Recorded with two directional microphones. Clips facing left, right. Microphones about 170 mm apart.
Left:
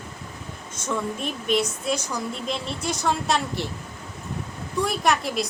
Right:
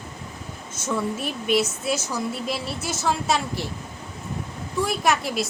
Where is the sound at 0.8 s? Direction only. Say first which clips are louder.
Right 1 dB; 5° right (ahead or behind).